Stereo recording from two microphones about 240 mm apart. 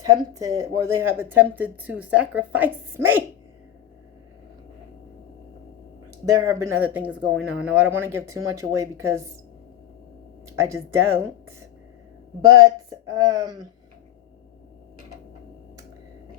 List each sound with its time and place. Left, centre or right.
0.0 s speech: centre
6.2 s speech: centre
10.5 s speech: centre
13.1 s speech: centre